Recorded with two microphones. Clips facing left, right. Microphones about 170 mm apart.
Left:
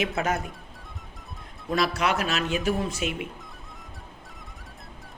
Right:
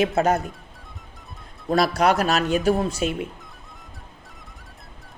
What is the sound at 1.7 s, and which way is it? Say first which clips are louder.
Speech: right 6 dB; 40° right (ahead or behind).